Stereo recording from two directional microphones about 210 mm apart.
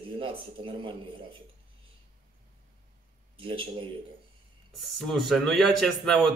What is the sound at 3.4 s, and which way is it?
Speech, 25° right (ahead or behind).